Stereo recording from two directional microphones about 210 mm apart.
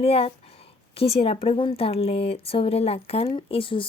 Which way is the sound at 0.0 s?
30° left (ahead or behind).